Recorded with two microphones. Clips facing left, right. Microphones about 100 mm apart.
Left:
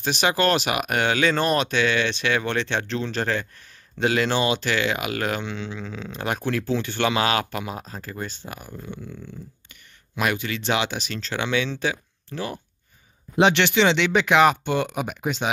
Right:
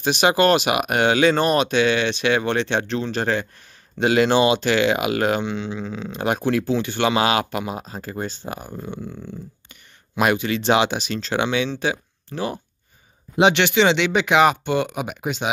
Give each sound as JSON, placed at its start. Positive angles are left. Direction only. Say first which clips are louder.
{"t": 0.0, "sound": "speech", "louder": "right 4 dB", "side_deg": -15}
{"t": 10.1, "sound": "speech", "louder": "right 5 dB", "side_deg": -25}
{"t": 13.4, "sound": "speech", "louder": "right 2 dB", "side_deg": -10}